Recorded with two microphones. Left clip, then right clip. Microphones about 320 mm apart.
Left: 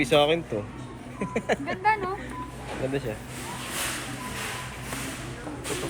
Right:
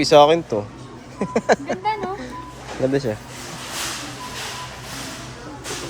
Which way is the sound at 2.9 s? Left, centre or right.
Right.